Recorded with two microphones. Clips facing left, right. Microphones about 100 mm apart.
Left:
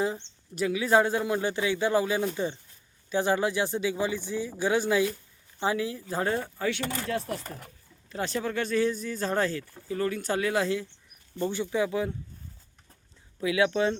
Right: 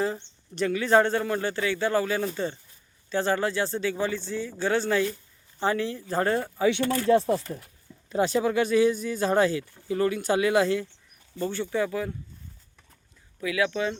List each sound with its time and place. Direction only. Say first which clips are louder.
0.5 s speech: right 2 dB; 5° left (ahead or behind)
7.1 s speech: right 13 dB; 30° right (ahead or behind)
8.1 s speech: right 7 dB; 15° right (ahead or behind)
11.4 s speech: even; 15° left (ahead or behind)
13.4 s speech: left 2 dB; 25° left (ahead or behind)